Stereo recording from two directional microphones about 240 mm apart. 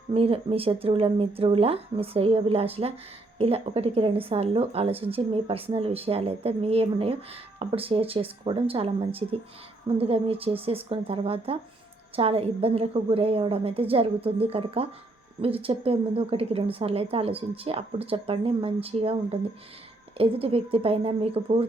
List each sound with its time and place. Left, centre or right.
0.1 s speech: right